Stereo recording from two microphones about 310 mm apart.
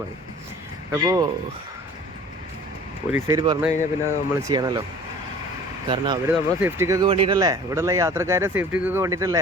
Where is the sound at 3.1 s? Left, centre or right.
Centre.